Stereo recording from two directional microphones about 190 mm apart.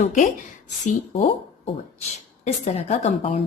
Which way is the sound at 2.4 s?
35° left (ahead or behind).